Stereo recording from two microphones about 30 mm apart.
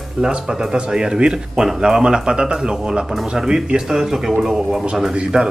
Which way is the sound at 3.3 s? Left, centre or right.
Centre.